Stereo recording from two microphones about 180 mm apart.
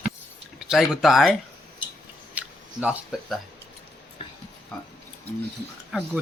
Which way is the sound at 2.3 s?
5° right (ahead or behind).